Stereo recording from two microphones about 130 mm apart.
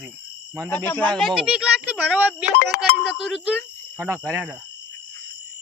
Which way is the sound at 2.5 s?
90° left.